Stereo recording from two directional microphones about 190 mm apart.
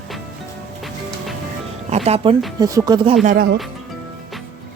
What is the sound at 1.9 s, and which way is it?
Speech, 35° right (ahead or behind).